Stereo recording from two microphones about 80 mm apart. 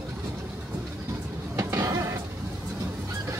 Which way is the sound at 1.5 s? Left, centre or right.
Right.